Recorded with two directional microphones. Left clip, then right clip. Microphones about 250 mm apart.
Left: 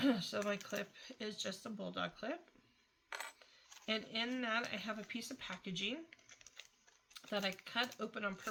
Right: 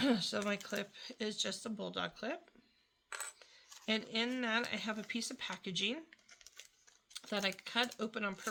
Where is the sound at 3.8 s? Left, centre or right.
Right.